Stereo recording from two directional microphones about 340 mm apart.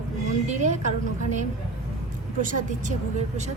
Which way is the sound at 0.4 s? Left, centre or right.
Right.